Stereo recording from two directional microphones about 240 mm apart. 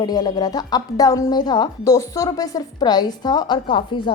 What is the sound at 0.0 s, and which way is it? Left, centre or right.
A woman's voice, centre.